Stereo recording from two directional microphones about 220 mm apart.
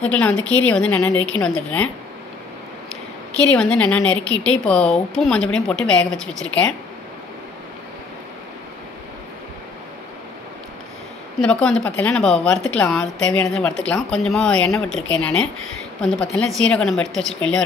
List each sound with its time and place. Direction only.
0.1 s a woman's voice: 5° left (ahead or behind)
3.4 s a woman's voice: 5° left (ahead or behind)
11.4 s a woman's voice: 5° left (ahead or behind)